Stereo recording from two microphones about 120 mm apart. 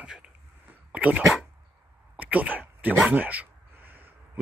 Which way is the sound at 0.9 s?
10° right (ahead or behind).